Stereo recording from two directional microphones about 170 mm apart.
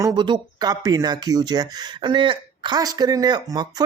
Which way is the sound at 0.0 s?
25° right (ahead or behind).